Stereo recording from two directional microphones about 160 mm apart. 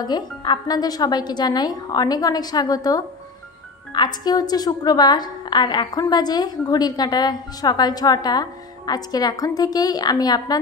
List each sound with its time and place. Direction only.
0.0 s a woman's voice: 25° left (ahead or behind)